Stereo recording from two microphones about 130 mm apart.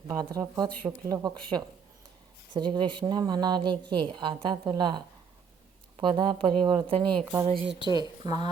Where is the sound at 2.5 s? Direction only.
35° right (ahead or behind).